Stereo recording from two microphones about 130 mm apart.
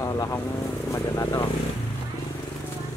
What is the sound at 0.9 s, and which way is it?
Speech, 25° left (ahead or behind).